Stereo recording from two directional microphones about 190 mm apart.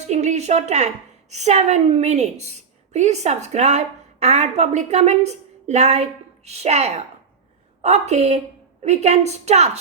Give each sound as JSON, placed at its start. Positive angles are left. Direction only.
{"t": 0.0, "sound": "a woman's voice", "side_deg": -35}